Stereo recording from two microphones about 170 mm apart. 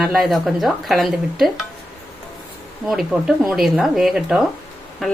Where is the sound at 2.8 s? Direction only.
Centre (ahead or behind).